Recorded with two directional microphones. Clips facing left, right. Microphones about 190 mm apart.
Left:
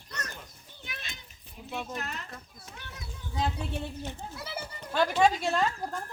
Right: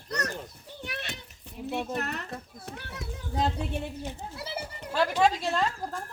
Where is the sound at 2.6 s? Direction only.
65° right (ahead or behind).